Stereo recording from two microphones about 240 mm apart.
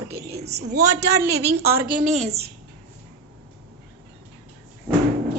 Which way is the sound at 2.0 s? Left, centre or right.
Right.